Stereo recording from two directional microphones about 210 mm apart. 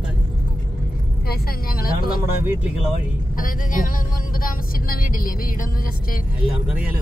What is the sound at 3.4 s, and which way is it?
Speech, 40° left (ahead or behind).